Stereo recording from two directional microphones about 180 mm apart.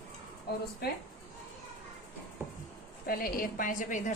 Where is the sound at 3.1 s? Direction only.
50° left (ahead or behind).